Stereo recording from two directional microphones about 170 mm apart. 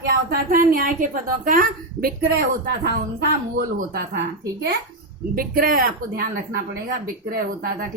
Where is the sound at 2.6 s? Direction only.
75° right (ahead or behind).